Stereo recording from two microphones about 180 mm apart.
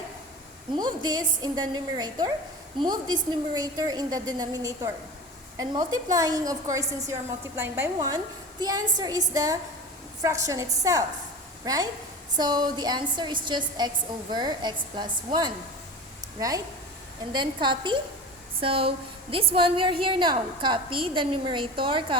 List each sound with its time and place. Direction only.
0.8 s a woman's voice: 20° right (ahead or behind)
17.3 s a woman's voice: 25° right (ahead or behind)